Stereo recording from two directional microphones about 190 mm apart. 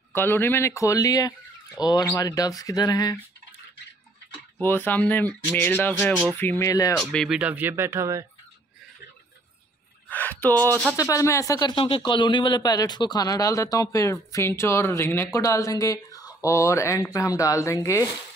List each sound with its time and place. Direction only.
0.1 s a man's voice: 10° left (ahead or behind)
4.6 s speech: 10° left (ahead or behind)
7.0 s speech: centre (ahead or behind); by 8.3 s 15° right (ahead or behind)
10.0 s a sound: 10° left (ahead or behind)
11.0 s a man's voice: 15° left (ahead or behind)